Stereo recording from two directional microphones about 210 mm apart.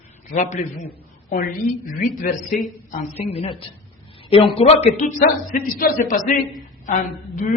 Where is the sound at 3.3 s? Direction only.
25° left (ahead or behind).